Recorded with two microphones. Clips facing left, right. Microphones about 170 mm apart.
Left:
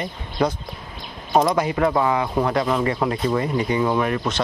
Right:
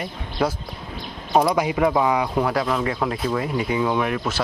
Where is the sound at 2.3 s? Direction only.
Centre (ahead or behind).